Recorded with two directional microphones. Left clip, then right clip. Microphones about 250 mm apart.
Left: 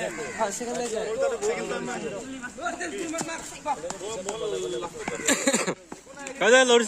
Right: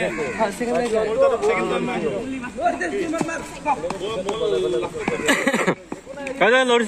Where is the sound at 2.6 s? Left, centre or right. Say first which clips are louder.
Right 10 dB; left.